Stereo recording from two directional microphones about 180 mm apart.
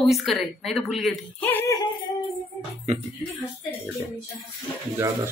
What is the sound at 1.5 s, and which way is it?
Music, 15° left (ahead or behind).